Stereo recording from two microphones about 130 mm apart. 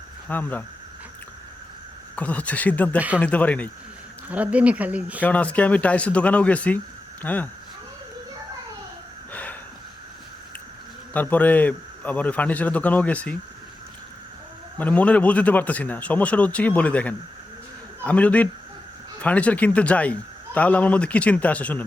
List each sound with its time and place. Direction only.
0.3 s speech: 15° left (ahead or behind)
2.1 s speech: 10° left (ahead or behind)
4.3 s speech: 10° right (ahead or behind)
5.2 s speech: 10° left (ahead or behind)
9.3 s a sound: 10° left (ahead or behind)
11.1 s speech: 10° left (ahead or behind)
14.8 s speech: 10° left (ahead or behind)